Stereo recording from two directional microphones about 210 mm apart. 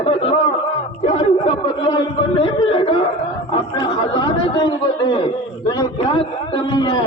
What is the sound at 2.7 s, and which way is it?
A man's voice, 25° left (ahead or behind).